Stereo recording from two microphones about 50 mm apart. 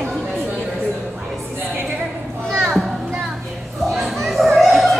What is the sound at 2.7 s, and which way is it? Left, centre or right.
Music, centre.